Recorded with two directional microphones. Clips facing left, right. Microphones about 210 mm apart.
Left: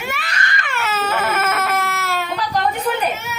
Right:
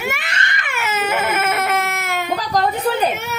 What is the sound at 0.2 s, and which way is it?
Baby cry, 25° right (ahead or behind).